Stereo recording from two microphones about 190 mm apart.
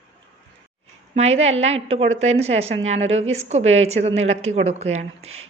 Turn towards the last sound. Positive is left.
turn(degrees=-35)  # may be behind; listen again after turning